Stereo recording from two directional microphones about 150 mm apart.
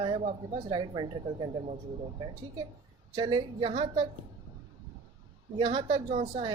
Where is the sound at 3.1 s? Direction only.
30° right (ahead or behind).